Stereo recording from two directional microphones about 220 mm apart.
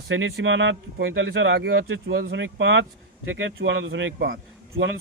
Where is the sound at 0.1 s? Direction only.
60° right (ahead or behind).